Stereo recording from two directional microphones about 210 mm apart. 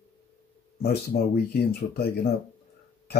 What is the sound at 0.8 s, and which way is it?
Speech, 50° left (ahead or behind).